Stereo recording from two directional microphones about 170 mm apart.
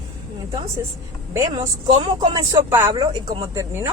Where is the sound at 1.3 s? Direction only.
15° right (ahead or behind).